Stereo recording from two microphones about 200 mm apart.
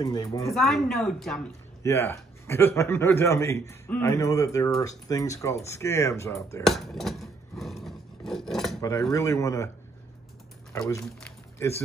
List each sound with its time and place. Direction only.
0.0 s a man's voice: 20° left (ahead or behind)
0.6 s speech: centre (ahead or behind)
1.8 s a man's voice: 10° left (ahead or behind)
6.6 s a sound: centre (ahead or behind)
9.1 s a man's voice: 15° left (ahead or behind)
10.7 s speech: 15° left (ahead or behind)
11.1 s a sound: 5° left (ahead or behind)